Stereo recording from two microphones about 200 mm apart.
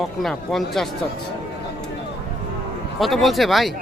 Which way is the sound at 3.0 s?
Centre (ahead or behind).